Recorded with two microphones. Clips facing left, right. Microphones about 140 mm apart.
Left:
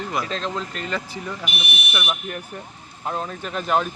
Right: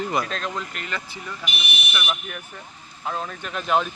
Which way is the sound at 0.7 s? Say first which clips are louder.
Left 4 dB; 35° left (ahead or behind).